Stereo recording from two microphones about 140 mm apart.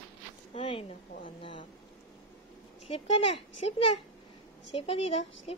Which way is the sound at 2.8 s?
50° left (ahead or behind).